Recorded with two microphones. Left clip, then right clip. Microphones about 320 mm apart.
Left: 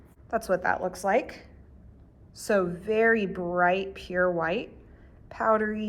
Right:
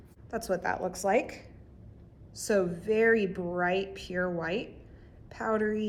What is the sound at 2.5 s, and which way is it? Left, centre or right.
Speech, left.